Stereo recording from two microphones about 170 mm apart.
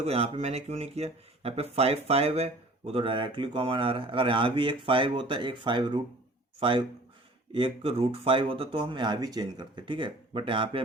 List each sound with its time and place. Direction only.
0.0 s speech: 40° right (ahead or behind)